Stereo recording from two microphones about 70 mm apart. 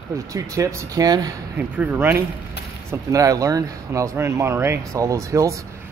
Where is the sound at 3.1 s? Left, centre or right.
Right.